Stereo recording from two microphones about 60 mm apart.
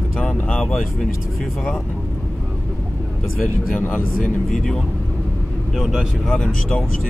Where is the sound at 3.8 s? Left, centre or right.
Left.